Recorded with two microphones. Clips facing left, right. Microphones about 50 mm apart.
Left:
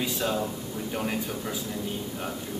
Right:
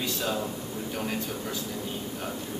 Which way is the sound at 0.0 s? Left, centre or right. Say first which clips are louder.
Left 2 dB; centre.